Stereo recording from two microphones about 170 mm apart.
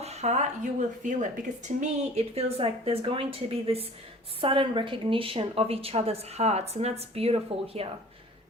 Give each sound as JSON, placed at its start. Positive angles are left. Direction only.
{"t": 0.0, "sound": "speech", "side_deg": -40}